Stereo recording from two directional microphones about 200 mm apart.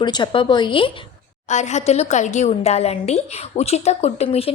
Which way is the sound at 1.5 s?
35° left (ahead or behind).